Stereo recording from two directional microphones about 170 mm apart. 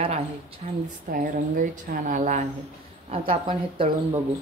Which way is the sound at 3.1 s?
30° right (ahead or behind).